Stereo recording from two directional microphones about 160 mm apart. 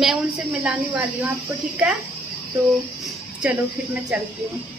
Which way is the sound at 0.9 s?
10° right (ahead or behind).